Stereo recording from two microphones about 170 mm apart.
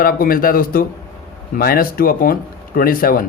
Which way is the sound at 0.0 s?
60° left (ahead or behind).